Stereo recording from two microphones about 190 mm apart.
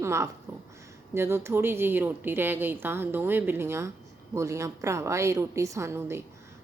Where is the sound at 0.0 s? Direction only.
15° right (ahead or behind).